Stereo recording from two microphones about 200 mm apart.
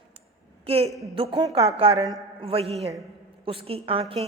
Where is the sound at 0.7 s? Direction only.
30° right (ahead or behind).